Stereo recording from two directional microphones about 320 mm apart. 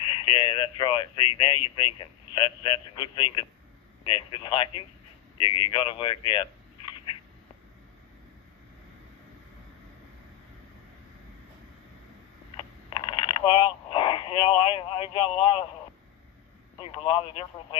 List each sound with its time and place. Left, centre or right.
0.0 s speech: centre
12.5 s a sound: centre
16.8 s speech: centre